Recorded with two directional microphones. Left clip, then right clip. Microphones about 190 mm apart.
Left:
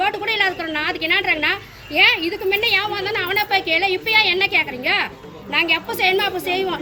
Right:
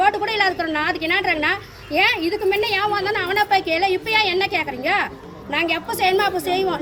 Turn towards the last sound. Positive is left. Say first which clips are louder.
# right 1 dB
turn(degrees=-15)  # may be behind; listen again after turning